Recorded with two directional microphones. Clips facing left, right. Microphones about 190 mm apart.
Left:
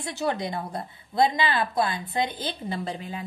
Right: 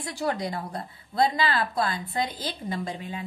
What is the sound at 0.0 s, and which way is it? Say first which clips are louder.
A woman's voice: left 1 dB; 25° left (ahead or behind).